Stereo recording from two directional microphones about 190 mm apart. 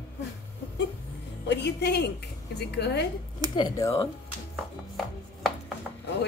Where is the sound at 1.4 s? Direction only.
60° left (ahead or behind).